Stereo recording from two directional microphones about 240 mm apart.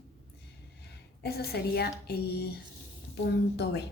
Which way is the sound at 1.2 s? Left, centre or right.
Left.